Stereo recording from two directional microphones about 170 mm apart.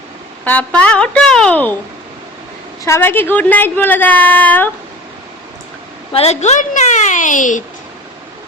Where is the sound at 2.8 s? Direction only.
15° left (ahead or behind).